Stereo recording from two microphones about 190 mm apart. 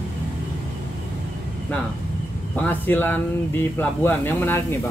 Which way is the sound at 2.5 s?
10° left (ahead or behind).